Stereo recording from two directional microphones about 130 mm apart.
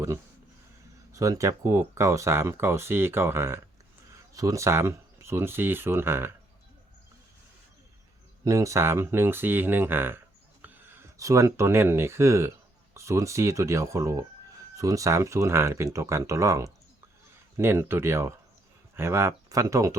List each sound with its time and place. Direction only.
1.1 s speech: 25° right (ahead or behind)
8.4 s speech: 25° right (ahead or behind)